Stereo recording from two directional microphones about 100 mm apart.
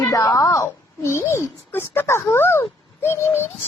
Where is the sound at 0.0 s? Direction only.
30° left (ahead or behind).